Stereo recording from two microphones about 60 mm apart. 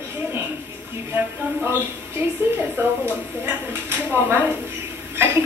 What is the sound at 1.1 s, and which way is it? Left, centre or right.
A woman's voice, right.